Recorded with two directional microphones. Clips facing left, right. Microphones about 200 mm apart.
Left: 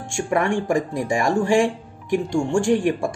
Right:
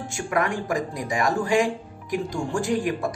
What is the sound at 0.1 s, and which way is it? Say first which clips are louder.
Speech: left 5 dB; 30° left (ahead or behind).